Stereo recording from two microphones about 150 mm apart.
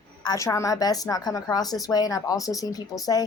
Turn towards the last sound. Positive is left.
turn(degrees=25)  # may be behind; listen again after turning